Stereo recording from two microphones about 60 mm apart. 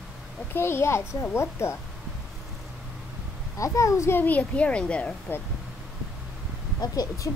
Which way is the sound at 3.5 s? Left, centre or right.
Left.